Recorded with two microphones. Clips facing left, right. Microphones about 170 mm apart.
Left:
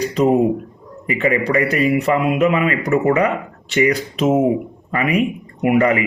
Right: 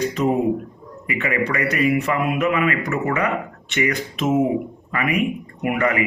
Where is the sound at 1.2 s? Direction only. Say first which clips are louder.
Left 5 dB; 30° left (ahead or behind).